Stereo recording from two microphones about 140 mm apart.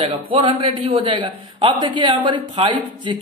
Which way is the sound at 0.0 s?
35° right (ahead or behind).